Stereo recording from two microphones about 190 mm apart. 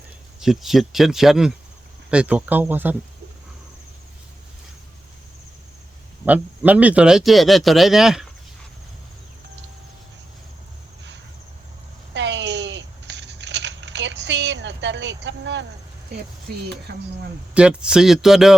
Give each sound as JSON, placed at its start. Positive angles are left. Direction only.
{"t": 0.3, "sound": "speech", "side_deg": 0}
{"t": 6.2, "sound": "speech", "side_deg": -10}
{"t": 12.1, "sound": "a sound", "side_deg": -70}
{"t": 16.9, "sound": "speech", "side_deg": -55}
{"t": 17.5, "sound": "speech", "side_deg": -5}